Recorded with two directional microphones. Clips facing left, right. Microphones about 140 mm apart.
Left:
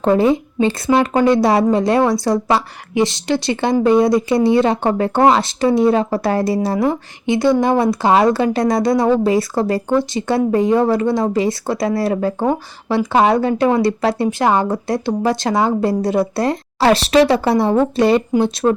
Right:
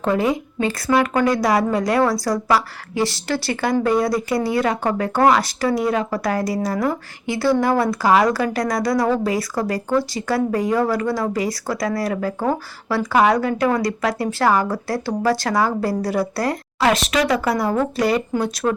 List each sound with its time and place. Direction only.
0.0 s speech: 30° left (ahead or behind)